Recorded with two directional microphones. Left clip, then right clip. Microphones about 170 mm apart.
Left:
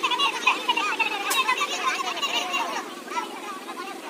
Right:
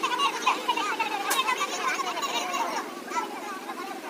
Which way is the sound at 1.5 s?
35° right (ahead or behind).